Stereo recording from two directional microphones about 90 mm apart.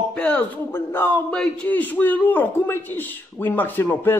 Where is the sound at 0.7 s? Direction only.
25° left (ahead or behind).